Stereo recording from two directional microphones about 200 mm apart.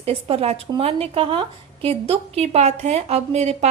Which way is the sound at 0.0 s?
30° right (ahead or behind).